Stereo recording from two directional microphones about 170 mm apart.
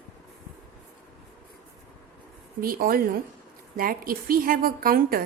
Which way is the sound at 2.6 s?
60° right (ahead or behind).